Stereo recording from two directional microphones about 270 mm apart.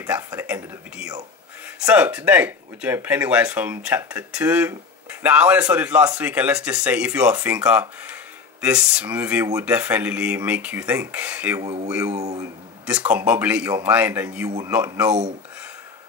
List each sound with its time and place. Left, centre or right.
0.0 s speech: centre
12.1 s speech: right
12.4 s speech: centre